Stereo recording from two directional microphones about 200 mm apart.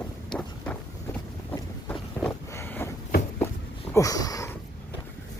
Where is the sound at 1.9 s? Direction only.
15° left (ahead or behind).